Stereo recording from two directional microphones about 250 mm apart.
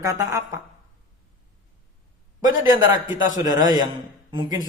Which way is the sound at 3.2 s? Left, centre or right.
Centre.